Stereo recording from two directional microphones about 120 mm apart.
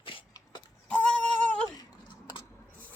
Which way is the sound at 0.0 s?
45° left (ahead or behind).